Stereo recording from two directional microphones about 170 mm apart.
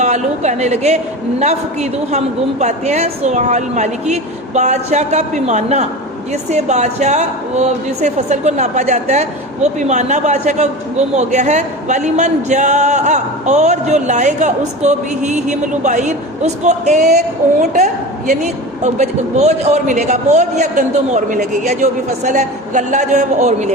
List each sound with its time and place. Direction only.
0.0 s a woman's voice: 45° right (ahead or behind)